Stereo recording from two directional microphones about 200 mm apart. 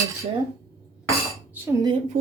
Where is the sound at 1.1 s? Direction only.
15° right (ahead or behind).